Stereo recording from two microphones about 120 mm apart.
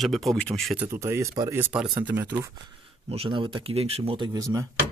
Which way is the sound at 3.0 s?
55° right (ahead or behind).